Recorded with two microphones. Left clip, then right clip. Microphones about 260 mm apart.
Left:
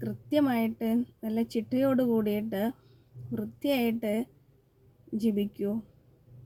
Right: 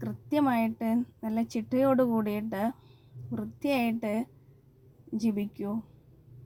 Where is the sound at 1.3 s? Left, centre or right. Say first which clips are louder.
Right 1 dB; centre.